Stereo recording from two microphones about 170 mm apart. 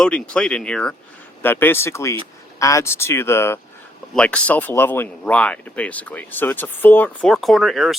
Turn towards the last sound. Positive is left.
turn(degrees=0)  # may be behind; listen again after turning